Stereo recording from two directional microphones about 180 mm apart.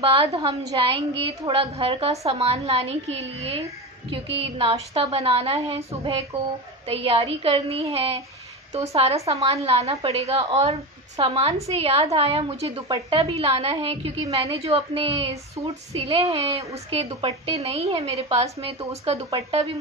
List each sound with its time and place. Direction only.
0.0 s a woman's voice: 30° right (ahead or behind)
6.3 s speech: 10° right (ahead or behind)
6.9 s a woman's voice: 30° right (ahead or behind)
12.8 s speech: 25° right (ahead or behind)
13.2 s a woman's voice: 35° right (ahead or behind)